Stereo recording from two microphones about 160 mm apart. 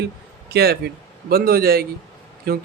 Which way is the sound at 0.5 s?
85° right.